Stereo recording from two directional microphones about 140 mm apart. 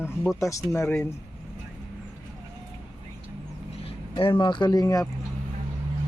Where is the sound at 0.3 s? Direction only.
20° left (ahead or behind).